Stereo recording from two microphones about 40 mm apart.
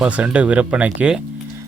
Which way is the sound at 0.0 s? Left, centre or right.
Right.